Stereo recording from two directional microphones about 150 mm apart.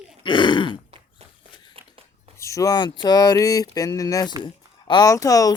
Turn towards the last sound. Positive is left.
turn(degrees=25)  # may be behind; listen again after turning